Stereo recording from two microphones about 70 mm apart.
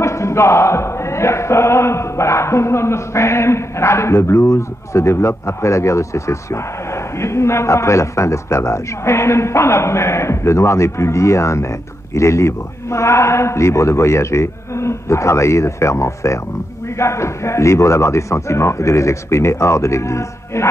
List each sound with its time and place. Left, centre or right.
0.0 s chant: left